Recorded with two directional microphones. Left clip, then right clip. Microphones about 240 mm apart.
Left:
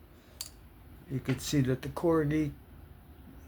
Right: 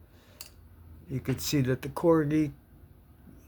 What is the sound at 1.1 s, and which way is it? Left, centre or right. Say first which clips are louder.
Speech: right 2 dB; right.